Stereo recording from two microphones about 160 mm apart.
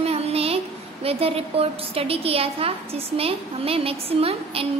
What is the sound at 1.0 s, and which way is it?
A woman's voice, 35° right (ahead or behind).